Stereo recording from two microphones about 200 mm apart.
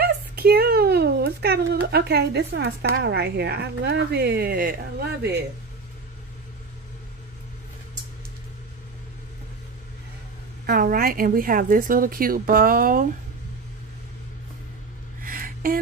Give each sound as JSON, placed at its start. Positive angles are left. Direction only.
{"t": 0.0, "sound": "a child's voice", "side_deg": -50}
{"t": 10.7, "sound": "a woman's voice", "side_deg": -45}
{"t": 15.2, "sound": "a sound", "side_deg": -45}